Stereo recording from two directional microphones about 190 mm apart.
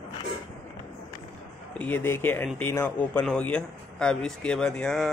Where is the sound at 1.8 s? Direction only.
10° left (ahead or behind).